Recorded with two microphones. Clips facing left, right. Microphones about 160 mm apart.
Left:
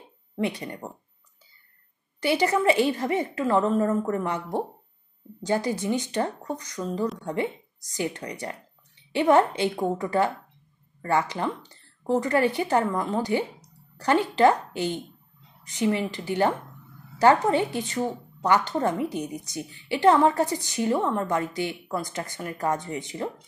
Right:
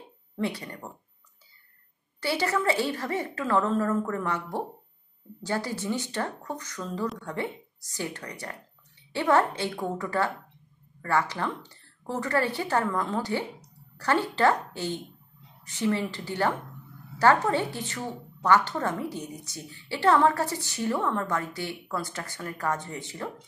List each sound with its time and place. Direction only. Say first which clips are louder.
0.4 s speech: left 3 dB; 20° left (ahead or behind)
2.1 s a woman's voice: left 4 dB; 15° left (ahead or behind)